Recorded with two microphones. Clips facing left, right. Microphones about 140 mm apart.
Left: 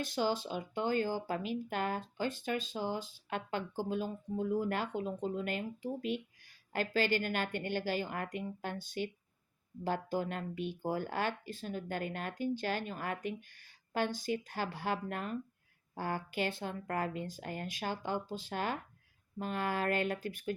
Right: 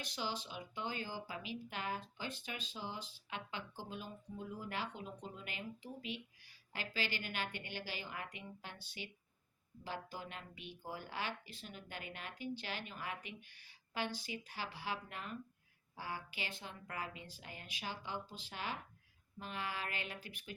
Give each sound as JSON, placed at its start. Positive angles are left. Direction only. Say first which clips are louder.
{"t": 0.0, "sound": "speech", "louder": "left 10 dB", "side_deg": 50}